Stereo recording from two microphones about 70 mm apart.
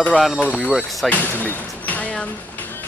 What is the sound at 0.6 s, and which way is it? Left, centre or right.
Speech, centre.